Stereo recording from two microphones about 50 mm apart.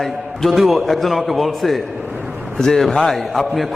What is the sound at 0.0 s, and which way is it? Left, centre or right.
A man's voice, centre.